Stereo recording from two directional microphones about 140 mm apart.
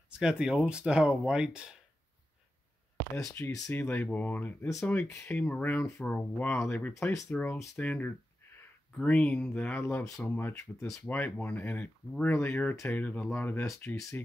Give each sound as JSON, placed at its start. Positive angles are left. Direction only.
{"t": 0.2, "sound": "speech", "side_deg": -5}
{"t": 3.2, "sound": "speech", "side_deg": 20}
{"t": 7.2, "sound": "speech", "side_deg": 10}
{"t": 7.5, "sound": "speech", "side_deg": 20}
{"t": 7.8, "sound": "speech", "side_deg": 10}